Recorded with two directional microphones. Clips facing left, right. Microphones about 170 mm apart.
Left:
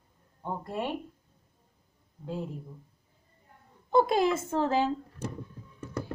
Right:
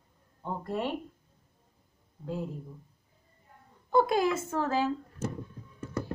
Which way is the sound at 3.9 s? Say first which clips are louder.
Left 1 dB; 20° left (ahead or behind).